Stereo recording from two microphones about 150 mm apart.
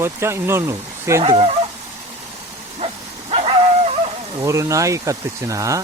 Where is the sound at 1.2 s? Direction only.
35° right (ahead or behind).